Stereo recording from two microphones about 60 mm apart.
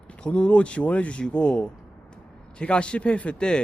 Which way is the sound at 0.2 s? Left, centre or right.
Centre.